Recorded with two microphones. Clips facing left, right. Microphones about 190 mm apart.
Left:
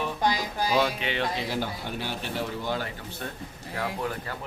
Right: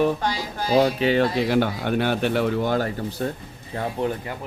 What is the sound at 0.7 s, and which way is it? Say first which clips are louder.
Speech: right 9 dB; 35° right (ahead or behind).